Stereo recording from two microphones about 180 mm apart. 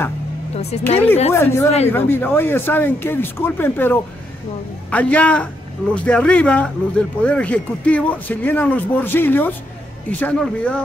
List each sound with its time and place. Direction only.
0.6 s speech: 35° left (ahead or behind)
1.3 s a man's voice: 15° left (ahead or behind)